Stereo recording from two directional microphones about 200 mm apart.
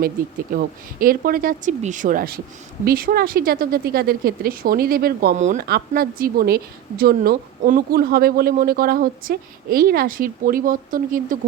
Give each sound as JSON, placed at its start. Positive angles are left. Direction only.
{"t": 0.5, "sound": "a woman's voice", "side_deg": -45}
{"t": 5.6, "sound": "a woman's voice", "side_deg": -50}